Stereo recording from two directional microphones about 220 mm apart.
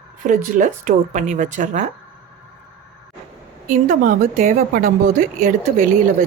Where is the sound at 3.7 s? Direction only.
35° right (ahead or behind).